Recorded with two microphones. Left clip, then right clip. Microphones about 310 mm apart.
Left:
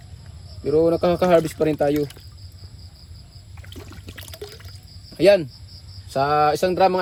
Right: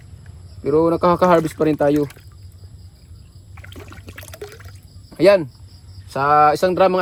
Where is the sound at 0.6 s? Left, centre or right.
Right.